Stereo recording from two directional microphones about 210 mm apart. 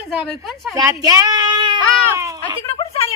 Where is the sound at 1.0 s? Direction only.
20° right (ahead or behind).